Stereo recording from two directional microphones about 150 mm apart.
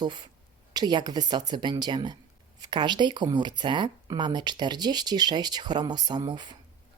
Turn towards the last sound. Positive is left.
turn(degrees=-30)  # may be behind; listen again after turning